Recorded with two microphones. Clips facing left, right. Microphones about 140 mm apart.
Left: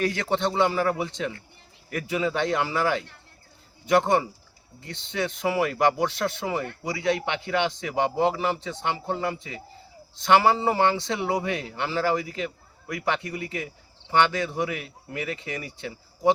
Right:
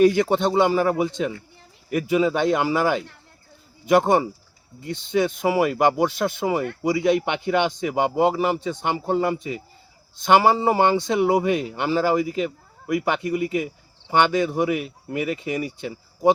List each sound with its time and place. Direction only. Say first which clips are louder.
0.0 s speech: right 8 dB; 15° right (ahead or behind)